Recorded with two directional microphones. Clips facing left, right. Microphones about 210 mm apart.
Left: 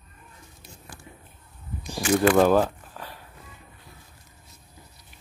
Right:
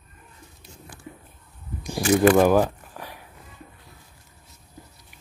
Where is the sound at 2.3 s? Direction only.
10° right (ahead or behind).